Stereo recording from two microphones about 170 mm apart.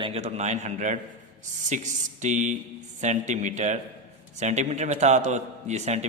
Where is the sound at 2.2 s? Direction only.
45° right (ahead or behind).